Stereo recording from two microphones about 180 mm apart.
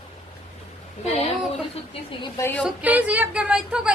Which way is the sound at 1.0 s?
35° left (ahead or behind).